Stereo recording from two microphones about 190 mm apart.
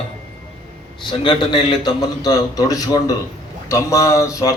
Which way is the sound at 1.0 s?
25° left (ahead or behind).